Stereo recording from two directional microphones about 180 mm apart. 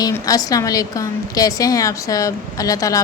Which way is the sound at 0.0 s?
20° left (ahead or behind).